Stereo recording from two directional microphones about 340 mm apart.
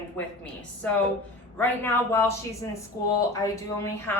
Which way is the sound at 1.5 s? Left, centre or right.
Centre.